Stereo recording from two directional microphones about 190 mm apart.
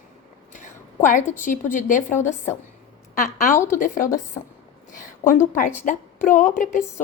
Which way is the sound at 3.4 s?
40° left (ahead or behind).